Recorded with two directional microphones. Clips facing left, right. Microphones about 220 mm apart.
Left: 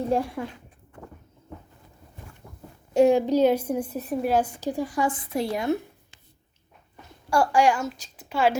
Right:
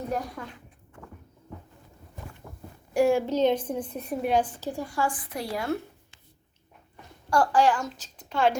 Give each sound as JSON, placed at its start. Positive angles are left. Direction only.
{"t": 0.1, "sound": "speech", "side_deg": 30}
{"t": 2.9, "sound": "a woman's voice", "side_deg": 20}
{"t": 7.3, "sound": "a woman's voice", "side_deg": 10}